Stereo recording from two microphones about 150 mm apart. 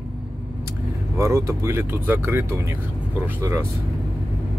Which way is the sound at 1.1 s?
20° right (ahead or behind).